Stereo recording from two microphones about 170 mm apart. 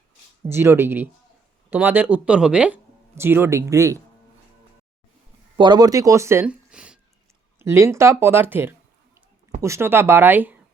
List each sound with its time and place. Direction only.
0.4 s speech: 15° right (ahead or behind)
5.5 s speech: 25° right (ahead or behind); by 7.0 s 5° right (ahead or behind)
7.6 s speech: 15° right (ahead or behind)